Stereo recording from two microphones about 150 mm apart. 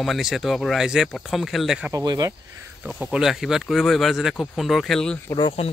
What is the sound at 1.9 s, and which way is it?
Speech, 20° right (ahead or behind).